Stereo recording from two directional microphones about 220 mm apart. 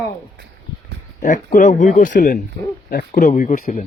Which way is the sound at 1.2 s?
35° left (ahead or behind).